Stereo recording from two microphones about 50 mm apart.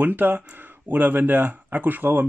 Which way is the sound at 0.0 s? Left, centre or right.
Right.